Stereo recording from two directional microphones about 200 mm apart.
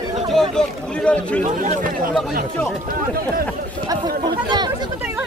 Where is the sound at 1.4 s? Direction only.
40° right (ahead or behind).